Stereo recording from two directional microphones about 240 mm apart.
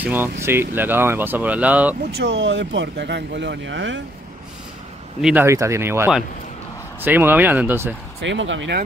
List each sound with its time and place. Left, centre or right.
0.0 s speech: centre
2.1 s speech: right
5.2 s speech: centre
8.2 s speech: right